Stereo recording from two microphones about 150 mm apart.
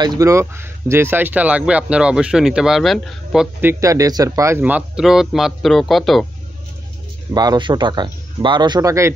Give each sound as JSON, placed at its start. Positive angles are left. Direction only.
{"t": 0.0, "sound": "speech", "side_deg": -25}
{"t": 3.6, "sound": "speech", "side_deg": -20}
{"t": 7.3, "sound": "speech", "side_deg": -30}